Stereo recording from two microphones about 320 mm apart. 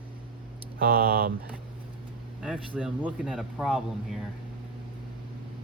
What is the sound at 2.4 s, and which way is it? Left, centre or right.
Speech, centre.